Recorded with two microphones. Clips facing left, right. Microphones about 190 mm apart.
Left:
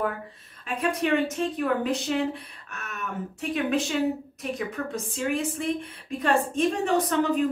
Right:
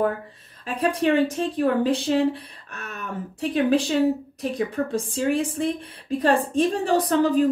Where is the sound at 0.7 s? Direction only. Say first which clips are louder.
Right 4 dB; 35° right (ahead or behind).